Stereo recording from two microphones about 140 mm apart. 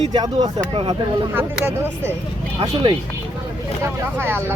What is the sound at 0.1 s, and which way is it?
Speech, 30° right (ahead or behind).